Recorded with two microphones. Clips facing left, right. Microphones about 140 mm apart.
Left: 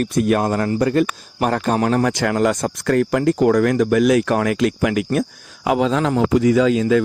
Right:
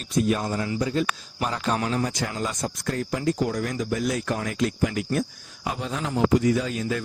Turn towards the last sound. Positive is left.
turn(degrees=90)